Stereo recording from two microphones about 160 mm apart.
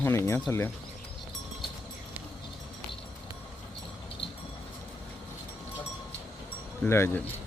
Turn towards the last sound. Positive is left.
turn(degrees=15)  # may be behind; listen again after turning